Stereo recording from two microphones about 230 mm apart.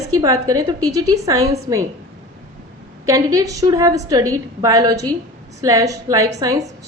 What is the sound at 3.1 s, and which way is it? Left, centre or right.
A woman's voice, centre.